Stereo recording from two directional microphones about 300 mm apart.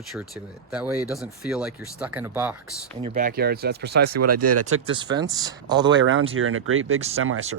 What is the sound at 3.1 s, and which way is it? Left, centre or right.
Speech, right.